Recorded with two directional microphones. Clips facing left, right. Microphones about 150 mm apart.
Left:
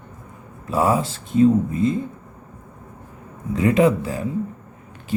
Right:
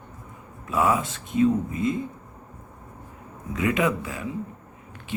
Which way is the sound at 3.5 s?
35° left (ahead or behind).